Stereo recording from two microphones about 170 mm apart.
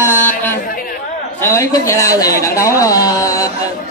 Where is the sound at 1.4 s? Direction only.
15° left (ahead or behind).